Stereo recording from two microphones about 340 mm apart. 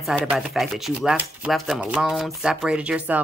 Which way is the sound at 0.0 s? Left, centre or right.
Centre.